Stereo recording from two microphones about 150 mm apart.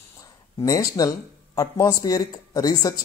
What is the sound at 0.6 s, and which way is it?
Speech, 25° left (ahead or behind).